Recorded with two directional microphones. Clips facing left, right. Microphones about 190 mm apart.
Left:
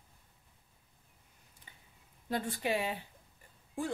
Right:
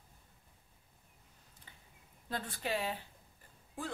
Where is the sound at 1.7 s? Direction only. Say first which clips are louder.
Left 1 dB; 15° left (ahead or behind).